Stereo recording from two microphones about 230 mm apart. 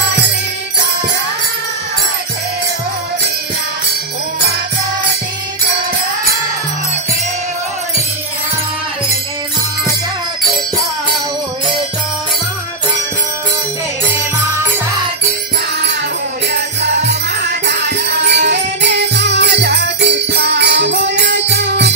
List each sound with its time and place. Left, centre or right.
16.5 s music: right